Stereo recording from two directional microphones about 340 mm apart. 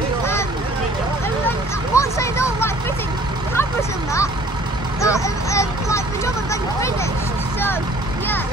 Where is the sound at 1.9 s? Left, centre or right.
Centre.